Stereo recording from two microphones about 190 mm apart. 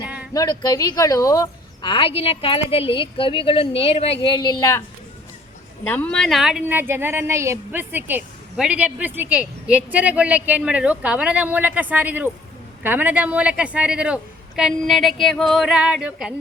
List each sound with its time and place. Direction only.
0.3 s a woman's voice: 20° left (ahead or behind)
5.8 s a woman's voice: 10° left (ahead or behind)